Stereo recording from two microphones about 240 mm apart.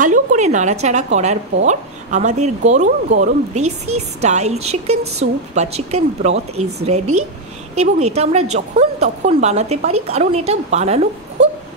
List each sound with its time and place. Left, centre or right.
0.0 s speech: right